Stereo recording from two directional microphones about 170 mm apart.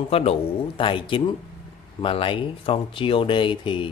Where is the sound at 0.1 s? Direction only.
35° left (ahead or behind).